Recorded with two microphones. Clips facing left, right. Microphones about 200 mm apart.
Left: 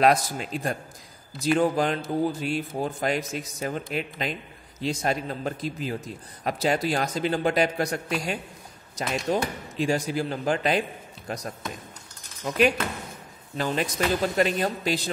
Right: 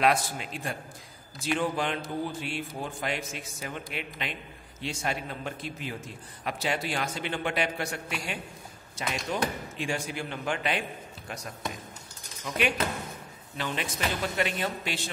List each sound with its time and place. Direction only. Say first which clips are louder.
0.0 s speech: left 4 dB; 40° left (ahead or behind)